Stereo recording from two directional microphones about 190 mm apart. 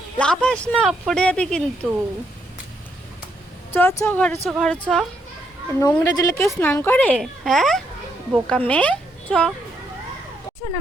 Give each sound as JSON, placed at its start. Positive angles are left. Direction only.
{"t": 0.2, "sound": "speech", "side_deg": 5}
{"t": 3.7, "sound": "a woman's voice", "side_deg": 10}
{"t": 5.8, "sound": "a woman's voice", "side_deg": 15}